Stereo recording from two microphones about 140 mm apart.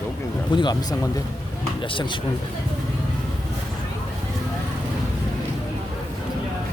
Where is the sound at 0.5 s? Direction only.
30° left (ahead or behind).